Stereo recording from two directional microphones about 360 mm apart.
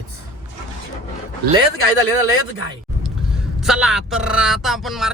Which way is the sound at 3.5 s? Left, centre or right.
Centre.